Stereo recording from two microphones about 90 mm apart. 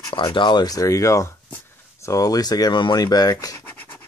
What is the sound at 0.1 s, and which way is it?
Speech, 70° left (ahead or behind).